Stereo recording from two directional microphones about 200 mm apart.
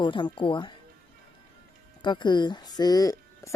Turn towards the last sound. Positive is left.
turn(degrees=20)  # may be behind; listen again after turning